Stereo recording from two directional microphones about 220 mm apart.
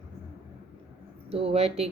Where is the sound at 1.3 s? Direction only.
25° right (ahead or behind).